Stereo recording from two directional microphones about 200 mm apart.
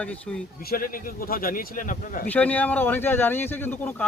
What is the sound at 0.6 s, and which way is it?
A man's voice, 45° left (ahead or behind).